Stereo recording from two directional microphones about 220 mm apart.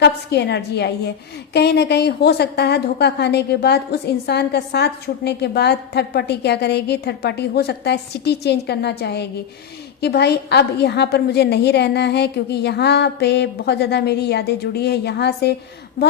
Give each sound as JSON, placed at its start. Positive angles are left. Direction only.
{"t": 0.0, "sound": "a woman's voice", "side_deg": 50}